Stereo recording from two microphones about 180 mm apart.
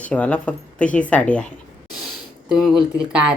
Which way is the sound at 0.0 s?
5° left (ahead or behind).